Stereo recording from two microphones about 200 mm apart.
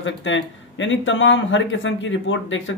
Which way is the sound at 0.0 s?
70° left (ahead or behind).